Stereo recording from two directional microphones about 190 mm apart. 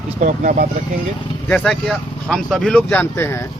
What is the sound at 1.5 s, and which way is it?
Speech, 5° left (ahead or behind).